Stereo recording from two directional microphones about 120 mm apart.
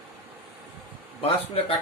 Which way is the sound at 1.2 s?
55° left (ahead or behind).